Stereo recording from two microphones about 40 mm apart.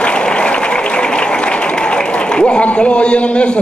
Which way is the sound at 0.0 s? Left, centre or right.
Left.